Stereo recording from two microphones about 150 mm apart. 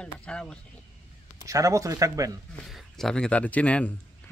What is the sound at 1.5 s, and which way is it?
Speech, 20° right (ahead or behind).